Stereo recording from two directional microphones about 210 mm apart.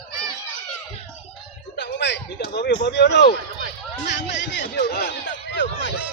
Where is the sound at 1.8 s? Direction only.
55° left (ahead or behind).